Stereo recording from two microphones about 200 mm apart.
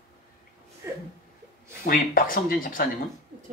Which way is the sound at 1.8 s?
45° left (ahead or behind).